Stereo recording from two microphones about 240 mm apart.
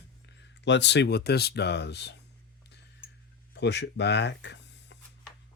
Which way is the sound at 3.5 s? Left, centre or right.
Left.